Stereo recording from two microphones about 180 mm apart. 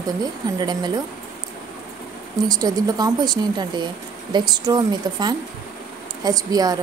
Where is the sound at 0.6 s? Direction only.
25° right (ahead or behind).